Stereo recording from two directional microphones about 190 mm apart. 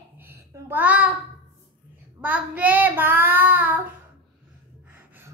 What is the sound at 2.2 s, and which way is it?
Child singing, 10° right (ahead or behind).